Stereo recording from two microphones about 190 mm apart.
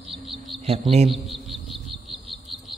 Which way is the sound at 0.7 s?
30° right (ahead or behind).